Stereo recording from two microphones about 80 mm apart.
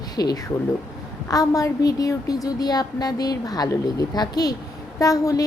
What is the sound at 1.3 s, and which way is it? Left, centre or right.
A woman's voice, left.